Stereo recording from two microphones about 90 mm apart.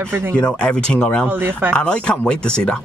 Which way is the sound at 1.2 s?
20° right (ahead or behind).